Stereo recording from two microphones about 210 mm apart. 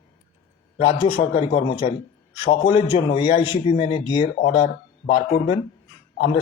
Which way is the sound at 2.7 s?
25° left (ahead or behind).